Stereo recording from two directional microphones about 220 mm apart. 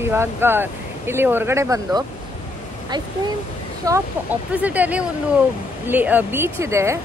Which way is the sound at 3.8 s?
15° right (ahead or behind).